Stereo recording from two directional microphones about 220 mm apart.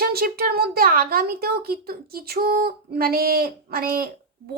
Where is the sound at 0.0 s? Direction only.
45° right (ahead or behind).